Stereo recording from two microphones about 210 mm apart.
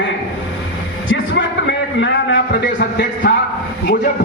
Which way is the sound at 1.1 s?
60° left (ahead or behind).